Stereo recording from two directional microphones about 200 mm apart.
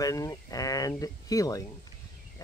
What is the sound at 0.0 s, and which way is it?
Speech, 15° left (ahead or behind).